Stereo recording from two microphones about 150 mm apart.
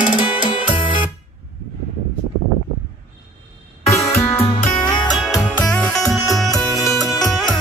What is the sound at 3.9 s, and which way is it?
Music, 20° left (ahead or behind).